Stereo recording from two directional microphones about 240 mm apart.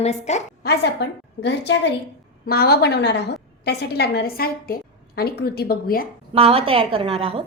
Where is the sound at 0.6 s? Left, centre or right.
Left.